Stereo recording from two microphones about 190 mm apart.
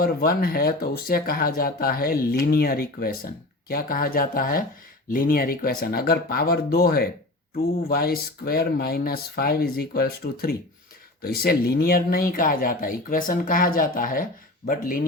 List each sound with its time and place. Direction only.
0.0 s speech: 50° left (ahead or behind)